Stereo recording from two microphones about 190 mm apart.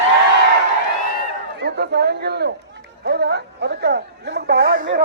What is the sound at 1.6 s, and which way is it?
A woman's voice, 60° right (ahead or behind).